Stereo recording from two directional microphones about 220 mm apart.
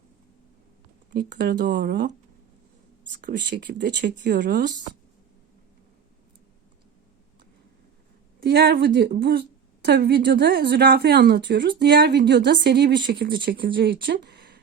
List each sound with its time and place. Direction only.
1.1 s a woman's voice: 50° right (ahead or behind)
3.2 s a woman's voice: 45° right (ahead or behind)
8.4 s a woman's voice: 45° right (ahead or behind)